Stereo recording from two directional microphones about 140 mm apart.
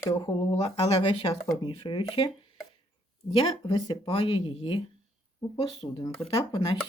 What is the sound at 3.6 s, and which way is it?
Speech, 30° left (ahead or behind).